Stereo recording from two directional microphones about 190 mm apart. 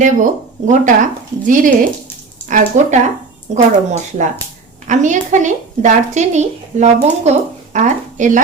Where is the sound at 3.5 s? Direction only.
40° right (ahead or behind).